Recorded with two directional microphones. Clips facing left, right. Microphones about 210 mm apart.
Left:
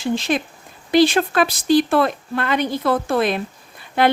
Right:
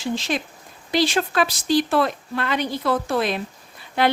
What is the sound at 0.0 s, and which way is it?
A woman's voice, 55° left (ahead or behind).